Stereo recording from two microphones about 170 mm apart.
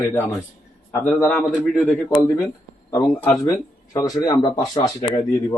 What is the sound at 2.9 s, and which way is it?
Speech, 10° left (ahead or behind).